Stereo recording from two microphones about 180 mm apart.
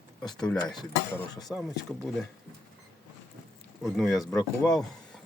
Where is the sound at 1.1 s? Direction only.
20° left (ahead or behind).